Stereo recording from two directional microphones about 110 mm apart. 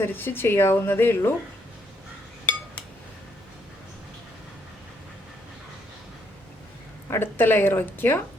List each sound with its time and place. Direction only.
0.0 s speech: 20° left (ahead or behind)
7.1 s speech: 20° left (ahead or behind)